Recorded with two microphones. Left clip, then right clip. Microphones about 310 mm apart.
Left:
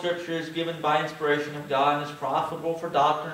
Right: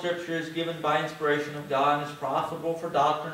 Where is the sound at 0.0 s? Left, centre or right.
Centre.